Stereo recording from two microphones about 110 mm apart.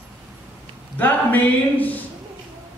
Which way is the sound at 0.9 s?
15° left (ahead or behind).